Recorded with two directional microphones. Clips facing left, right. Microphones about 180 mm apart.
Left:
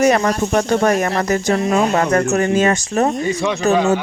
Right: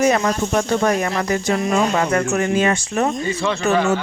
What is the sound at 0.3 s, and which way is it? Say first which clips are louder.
Speech: left 2 dB; 50° left (ahead or behind).